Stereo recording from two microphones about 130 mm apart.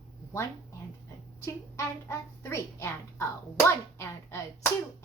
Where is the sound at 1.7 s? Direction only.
20° left (ahead or behind).